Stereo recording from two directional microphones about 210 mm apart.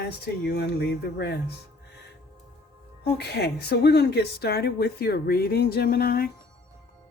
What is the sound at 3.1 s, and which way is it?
Speech, 50° left (ahead or behind).